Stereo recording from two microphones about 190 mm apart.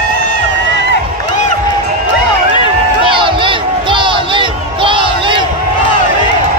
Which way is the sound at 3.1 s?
25° right (ahead or behind).